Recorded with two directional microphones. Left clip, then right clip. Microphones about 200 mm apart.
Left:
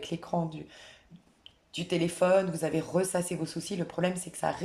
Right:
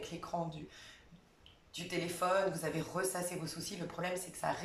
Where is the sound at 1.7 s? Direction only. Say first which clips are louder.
Left 8 dB; 45° left (ahead or behind).